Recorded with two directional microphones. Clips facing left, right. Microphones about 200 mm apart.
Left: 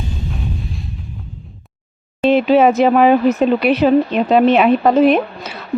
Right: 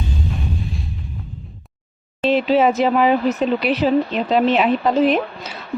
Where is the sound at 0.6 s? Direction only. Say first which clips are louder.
Right 1 dB; centre (ahead or behind).